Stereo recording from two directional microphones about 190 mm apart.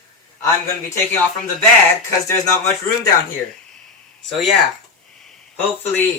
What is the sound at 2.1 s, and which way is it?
Speech, 15° left (ahead or behind).